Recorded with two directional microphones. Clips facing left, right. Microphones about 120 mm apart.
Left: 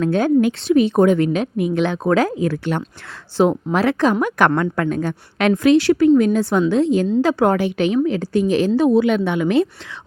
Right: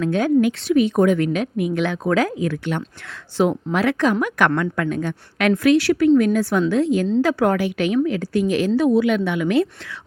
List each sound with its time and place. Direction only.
0.0 s a woman's voice: 35° left (ahead or behind)